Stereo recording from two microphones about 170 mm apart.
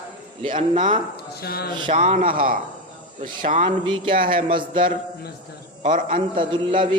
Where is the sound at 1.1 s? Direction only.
70° left (ahead or behind).